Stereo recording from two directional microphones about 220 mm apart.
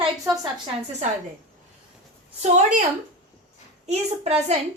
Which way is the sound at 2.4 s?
30° right (ahead or behind).